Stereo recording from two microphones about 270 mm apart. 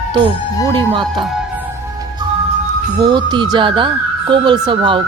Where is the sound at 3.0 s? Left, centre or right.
Centre.